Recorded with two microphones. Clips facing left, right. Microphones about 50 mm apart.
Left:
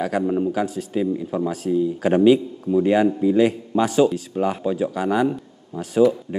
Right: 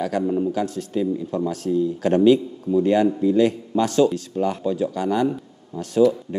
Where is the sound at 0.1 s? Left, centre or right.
Centre.